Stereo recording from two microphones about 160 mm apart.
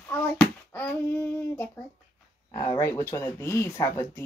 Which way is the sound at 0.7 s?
10° left (ahead or behind).